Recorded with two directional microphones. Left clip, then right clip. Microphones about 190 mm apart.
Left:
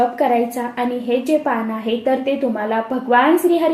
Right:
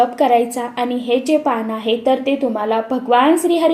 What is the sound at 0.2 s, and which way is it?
A woman's voice, 30° right (ahead or behind).